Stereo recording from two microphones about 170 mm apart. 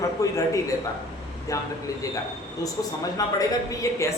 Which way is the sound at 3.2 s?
20° left (ahead or behind).